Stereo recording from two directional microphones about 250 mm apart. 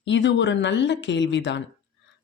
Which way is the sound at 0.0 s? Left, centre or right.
Left.